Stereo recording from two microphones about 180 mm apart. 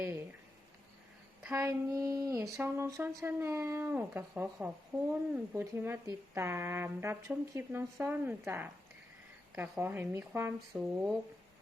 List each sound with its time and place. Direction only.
0.0 s a sound: 15° right (ahead or behind)
1.5 s speech: 15° right (ahead or behind)
4.9 s speech: 25° right (ahead or behind)
5.3 s speech: 10° right (ahead or behind)
10.7 s speech: centre (ahead or behind)